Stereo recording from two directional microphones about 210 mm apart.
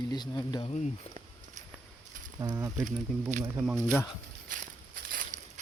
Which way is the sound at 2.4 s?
15° right (ahead or behind).